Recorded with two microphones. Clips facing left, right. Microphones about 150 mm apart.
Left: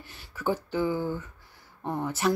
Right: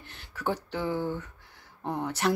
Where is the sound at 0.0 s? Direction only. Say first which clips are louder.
Left 2 dB; 5° left (ahead or behind).